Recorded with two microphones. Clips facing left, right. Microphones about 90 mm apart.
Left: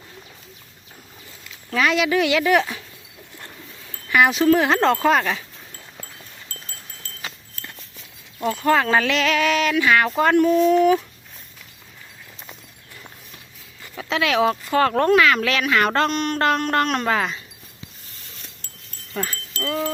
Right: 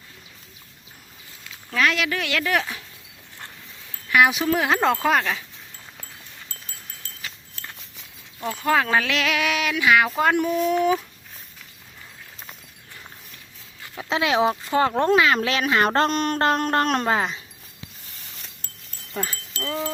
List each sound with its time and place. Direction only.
1.7 s speech: centre (ahead or behind)
4.1 s speech: 5° right (ahead or behind)
8.4 s speech: centre (ahead or behind)
14.1 s speech: 25° right (ahead or behind)
19.1 s wind chime: 20° right (ahead or behind)